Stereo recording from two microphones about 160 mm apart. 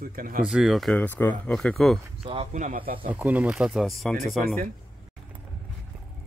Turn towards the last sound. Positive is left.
turn(degrees=0)  # may be behind; listen again after turning